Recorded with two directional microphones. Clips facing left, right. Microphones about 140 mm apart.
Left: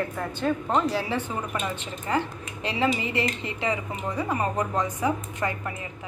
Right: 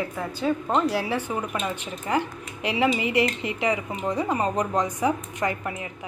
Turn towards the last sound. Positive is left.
turn(degrees=-20)  # may be behind; listen again after turning